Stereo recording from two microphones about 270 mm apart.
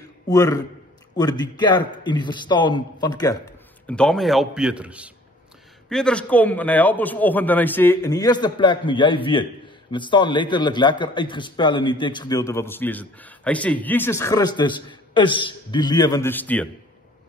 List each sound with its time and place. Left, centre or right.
0.3 s a man's voice: centre
3.8 s a man's voice: centre